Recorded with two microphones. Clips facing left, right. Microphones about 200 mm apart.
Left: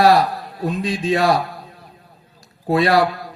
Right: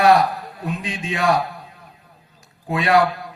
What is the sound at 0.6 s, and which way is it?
Speech, 35° left (ahead or behind).